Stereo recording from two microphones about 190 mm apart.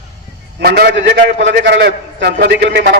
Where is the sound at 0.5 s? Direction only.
55° right (ahead or behind).